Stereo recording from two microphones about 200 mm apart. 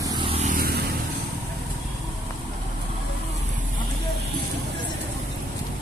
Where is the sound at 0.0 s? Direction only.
20° right (ahead or behind).